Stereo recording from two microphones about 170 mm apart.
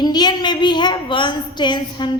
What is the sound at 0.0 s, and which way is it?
A woman's voice, 25° left (ahead or behind).